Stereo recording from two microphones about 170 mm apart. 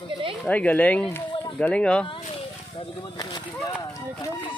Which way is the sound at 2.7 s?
30° left (ahead or behind).